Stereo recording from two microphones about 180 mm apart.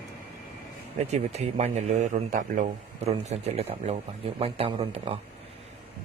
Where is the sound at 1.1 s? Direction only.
40° right (ahead or behind).